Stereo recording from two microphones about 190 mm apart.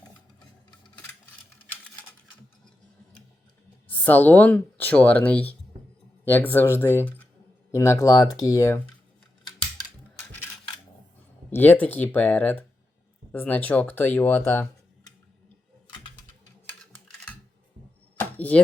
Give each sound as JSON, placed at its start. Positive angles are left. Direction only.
{"t": 3.8, "sound": "speech", "side_deg": 10}
{"t": 10.2, "sound": "a sound", "side_deg": 10}
{"t": 11.5, "sound": "speech", "side_deg": 10}
{"t": 18.2, "sound": "chop", "side_deg": 10}